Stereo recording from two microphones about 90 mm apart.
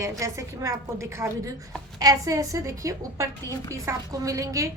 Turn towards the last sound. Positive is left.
turn(degrees=-40)  # may be behind; listen again after turning